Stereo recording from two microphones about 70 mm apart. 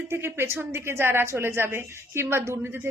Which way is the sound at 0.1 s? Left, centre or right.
Right.